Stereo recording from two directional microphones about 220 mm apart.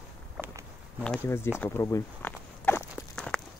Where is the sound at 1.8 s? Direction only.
10° left (ahead or behind).